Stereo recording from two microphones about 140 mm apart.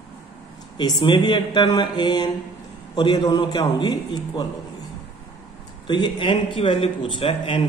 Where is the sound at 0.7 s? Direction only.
30° left (ahead or behind).